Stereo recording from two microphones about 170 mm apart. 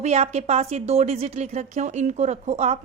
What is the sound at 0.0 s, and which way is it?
A woman's voice, 40° right (ahead or behind).